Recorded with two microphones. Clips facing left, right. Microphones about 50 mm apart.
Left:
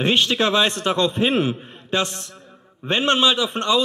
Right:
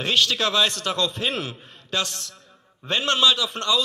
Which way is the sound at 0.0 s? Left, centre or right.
Left.